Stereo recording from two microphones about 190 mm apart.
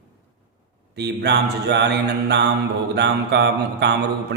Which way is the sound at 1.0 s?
65° right (ahead or behind).